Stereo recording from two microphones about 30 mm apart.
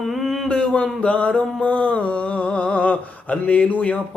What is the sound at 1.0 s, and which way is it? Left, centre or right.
Speech, left.